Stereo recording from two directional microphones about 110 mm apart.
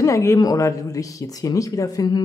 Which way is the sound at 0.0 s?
30° left (ahead or behind).